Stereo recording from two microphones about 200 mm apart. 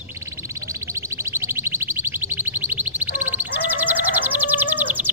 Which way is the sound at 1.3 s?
10° right (ahead or behind).